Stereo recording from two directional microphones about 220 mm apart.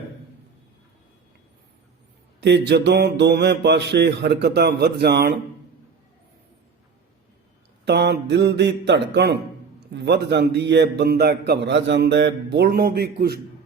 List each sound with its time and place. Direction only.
2.4 s a man's voice: 50° right (ahead or behind)
7.9 s a man's voice: 50° right (ahead or behind)